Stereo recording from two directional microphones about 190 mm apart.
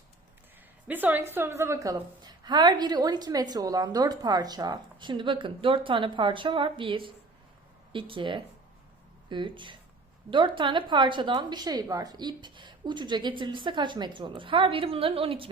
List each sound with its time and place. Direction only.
0.9 s a woman's voice: 10° right (ahead or behind); by 15.4 s 30° right (ahead or behind)